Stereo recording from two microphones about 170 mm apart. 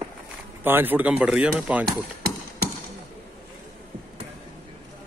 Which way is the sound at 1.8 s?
60° right (ahead or behind).